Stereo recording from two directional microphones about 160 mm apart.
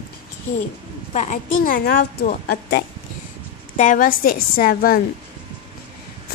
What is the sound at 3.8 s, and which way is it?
A woman's voice, 60° left (ahead or behind).